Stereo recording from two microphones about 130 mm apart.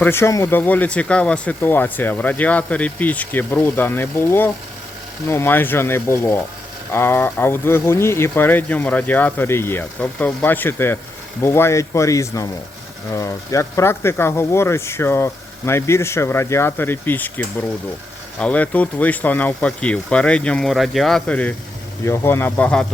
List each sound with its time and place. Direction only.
0.0 s speech: 20° left (ahead or behind)
22.0 s speech: 20° left (ahead or behind)